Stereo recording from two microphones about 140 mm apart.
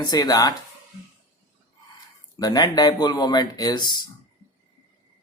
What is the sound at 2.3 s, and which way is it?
Speech, 30° left (ahead or behind).